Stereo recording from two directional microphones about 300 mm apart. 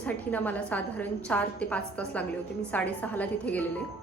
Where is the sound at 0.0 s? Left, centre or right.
Centre.